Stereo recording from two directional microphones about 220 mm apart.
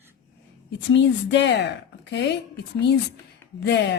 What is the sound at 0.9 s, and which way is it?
A woman's voice, 55° left (ahead or behind).